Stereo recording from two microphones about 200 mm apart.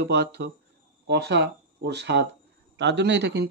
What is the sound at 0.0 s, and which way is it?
Speech, 55° right (ahead or behind).